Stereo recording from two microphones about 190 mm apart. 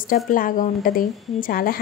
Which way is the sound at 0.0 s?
45° left (ahead or behind).